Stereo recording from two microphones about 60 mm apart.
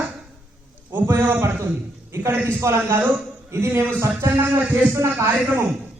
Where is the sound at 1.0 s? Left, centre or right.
Right.